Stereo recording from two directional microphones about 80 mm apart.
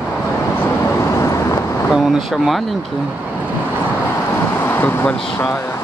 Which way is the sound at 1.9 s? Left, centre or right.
Centre.